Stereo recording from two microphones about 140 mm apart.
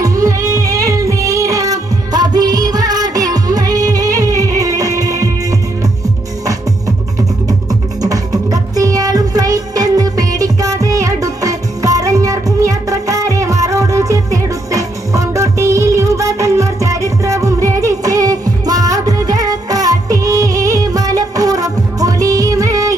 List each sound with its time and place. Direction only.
0.0 s music: 25° right (ahead or behind)